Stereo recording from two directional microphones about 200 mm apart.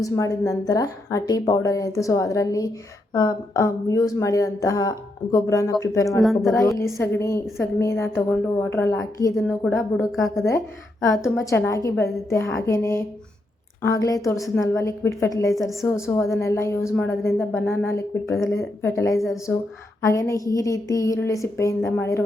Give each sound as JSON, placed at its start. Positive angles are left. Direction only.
{"t": 0.0, "sound": "a woman's voice", "side_deg": 15}
{"t": 6.2, "sound": "speech", "side_deg": 0}
{"t": 6.5, "sound": "a woman's voice", "side_deg": 15}
{"t": 10.0, "sound": "speech", "side_deg": 0}
{"t": 11.0, "sound": "a woman's voice", "side_deg": 15}
{"t": 14.3, "sound": "speech", "side_deg": 0}
{"t": 14.6, "sound": "a woman's voice", "side_deg": 15}